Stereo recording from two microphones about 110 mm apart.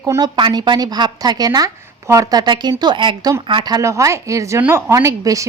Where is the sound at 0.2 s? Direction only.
40° right (ahead or behind).